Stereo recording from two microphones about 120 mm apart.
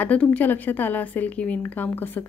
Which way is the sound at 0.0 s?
10° left (ahead or behind).